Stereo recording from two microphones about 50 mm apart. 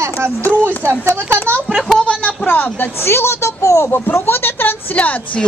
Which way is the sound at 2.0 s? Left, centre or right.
Left.